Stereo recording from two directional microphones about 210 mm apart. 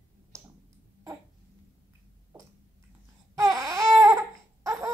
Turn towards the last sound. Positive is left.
turn(degrees=-15)  # may be behind; listen again after turning